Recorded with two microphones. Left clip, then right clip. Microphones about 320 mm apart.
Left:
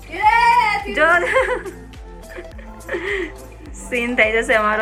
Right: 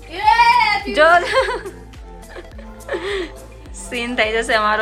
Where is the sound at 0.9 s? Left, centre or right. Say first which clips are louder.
Right 3 dB; centre.